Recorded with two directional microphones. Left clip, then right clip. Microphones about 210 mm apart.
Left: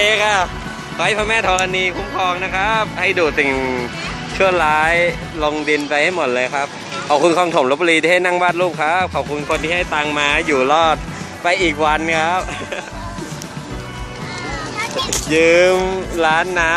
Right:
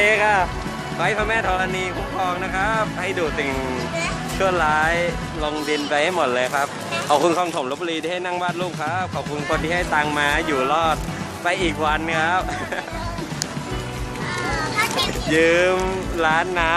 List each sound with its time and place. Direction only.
0.0 s music: 5° left (ahead or behind)
0.9 s music: 20° left (ahead or behind)
7.1 s speech: 15° left (ahead or behind)
7.5 s speech: 40° left (ahead or behind)
9.7 s speech: 15° left (ahead or behind)
10.5 s music: 30° left (ahead or behind)
15.3 s music: 20° left (ahead or behind)